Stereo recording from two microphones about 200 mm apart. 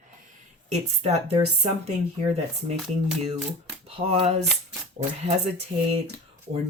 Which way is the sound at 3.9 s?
30° right (ahead or behind).